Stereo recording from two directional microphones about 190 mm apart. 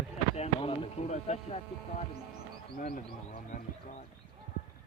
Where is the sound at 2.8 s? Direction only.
45° left (ahead or behind).